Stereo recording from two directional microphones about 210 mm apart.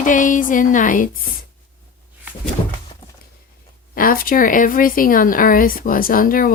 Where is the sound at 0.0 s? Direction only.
40° left (ahead or behind).